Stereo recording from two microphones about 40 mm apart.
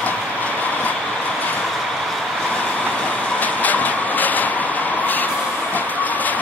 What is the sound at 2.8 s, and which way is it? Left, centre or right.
Vehicle, left.